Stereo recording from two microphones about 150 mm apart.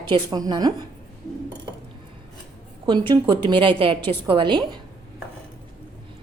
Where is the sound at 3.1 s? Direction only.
30° right (ahead or behind).